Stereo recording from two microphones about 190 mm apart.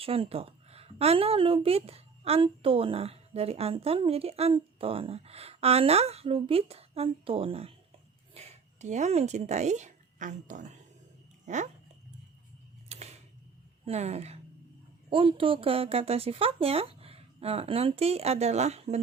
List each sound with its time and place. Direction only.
0.0 s a woman's voice: 30° right (ahead or behind)
12.9 s a sound: 35° right (ahead or behind)
13.8 s a woman's voice: 35° right (ahead or behind)